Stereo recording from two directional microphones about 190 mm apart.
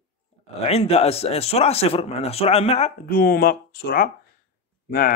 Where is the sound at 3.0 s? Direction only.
50° left (ahead or behind).